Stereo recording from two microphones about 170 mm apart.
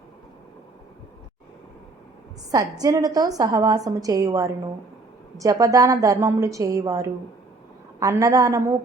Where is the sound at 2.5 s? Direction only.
20° right (ahead or behind).